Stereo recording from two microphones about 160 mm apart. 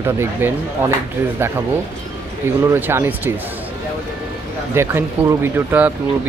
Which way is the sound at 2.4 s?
15° right (ahead or behind).